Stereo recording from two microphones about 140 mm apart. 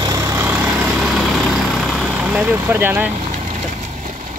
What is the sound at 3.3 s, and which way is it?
Vehicle, 60° right (ahead or behind).